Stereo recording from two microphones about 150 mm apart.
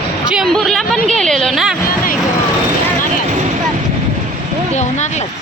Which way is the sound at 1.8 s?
65° left (ahead or behind).